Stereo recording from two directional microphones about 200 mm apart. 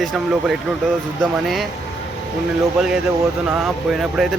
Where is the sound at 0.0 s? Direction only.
Centre (ahead or behind).